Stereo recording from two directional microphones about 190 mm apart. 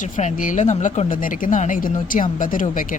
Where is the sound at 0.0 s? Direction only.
40° left (ahead or behind).